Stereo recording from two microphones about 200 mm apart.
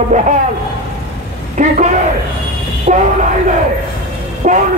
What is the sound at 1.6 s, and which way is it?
Speech, 40° right (ahead or behind).